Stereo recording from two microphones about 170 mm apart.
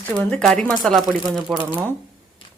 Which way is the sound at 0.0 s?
10° left (ahead or behind).